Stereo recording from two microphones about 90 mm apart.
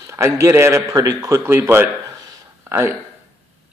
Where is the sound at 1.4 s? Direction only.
25° right (ahead or behind).